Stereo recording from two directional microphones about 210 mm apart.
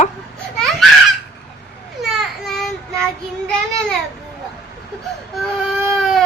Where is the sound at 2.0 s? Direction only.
Centre (ahead or behind).